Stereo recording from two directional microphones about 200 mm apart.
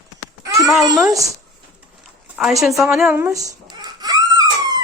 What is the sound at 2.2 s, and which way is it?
Speech, 5° right (ahead or behind).